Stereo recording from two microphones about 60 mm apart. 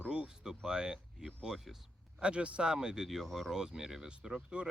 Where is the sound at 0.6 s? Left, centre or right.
Centre.